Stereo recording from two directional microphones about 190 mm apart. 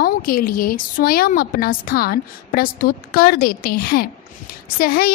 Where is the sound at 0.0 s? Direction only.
50° left (ahead or behind).